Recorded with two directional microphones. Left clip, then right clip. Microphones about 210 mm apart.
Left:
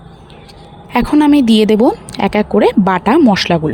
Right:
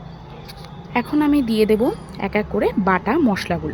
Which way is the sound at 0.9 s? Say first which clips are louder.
Left 8 dB; 45° left (ahead or behind).